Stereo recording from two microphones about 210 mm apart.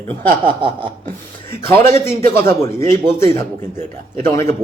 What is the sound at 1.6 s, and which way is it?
A man's voice, 10° left (ahead or behind).